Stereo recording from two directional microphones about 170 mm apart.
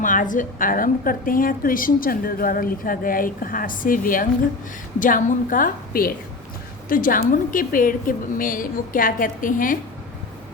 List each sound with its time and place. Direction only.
0.0 s a woman's voice: 50° left (ahead or behind)